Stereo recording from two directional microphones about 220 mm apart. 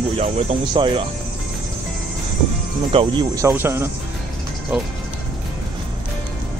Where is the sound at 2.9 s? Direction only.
20° right (ahead or behind).